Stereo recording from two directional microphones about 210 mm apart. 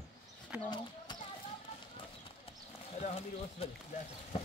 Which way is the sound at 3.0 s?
30° left (ahead or behind).